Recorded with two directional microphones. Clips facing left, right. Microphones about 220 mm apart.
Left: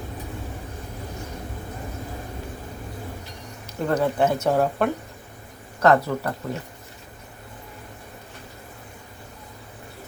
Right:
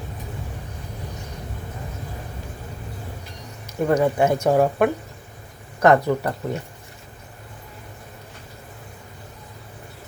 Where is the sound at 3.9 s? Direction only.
10° right (ahead or behind).